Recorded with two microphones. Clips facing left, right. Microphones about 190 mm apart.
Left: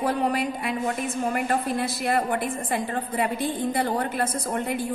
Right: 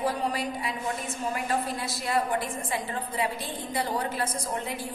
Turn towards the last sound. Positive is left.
turn(degrees=55)  # may be behind; listen again after turning